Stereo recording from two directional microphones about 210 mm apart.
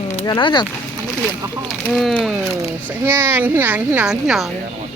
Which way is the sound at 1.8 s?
5° left (ahead or behind).